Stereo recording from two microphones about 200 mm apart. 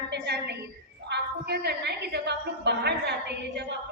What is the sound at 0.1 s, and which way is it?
A woman's voice, 55° right (ahead or behind).